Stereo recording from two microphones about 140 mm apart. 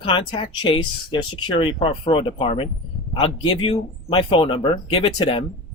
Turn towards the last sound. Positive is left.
turn(degrees=35)  # may be behind; listen again after turning